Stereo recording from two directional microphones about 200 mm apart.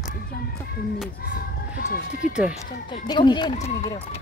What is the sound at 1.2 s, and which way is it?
Speech, 45° left (ahead or behind).